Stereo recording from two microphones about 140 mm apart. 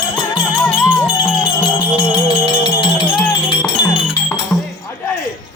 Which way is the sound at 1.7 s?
35° left (ahead or behind).